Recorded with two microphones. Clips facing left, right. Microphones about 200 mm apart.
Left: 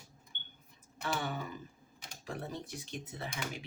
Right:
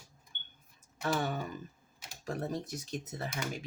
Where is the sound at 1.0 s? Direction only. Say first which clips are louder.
Right 4 dB; 45° right (ahead or behind).